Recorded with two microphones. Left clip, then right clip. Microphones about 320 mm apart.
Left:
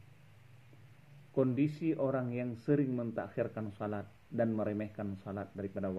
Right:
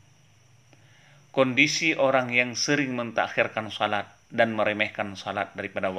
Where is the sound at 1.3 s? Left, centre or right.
Right.